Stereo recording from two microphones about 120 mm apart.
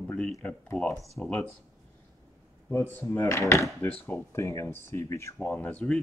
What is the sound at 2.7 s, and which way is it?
Speech, 20° left (ahead or behind).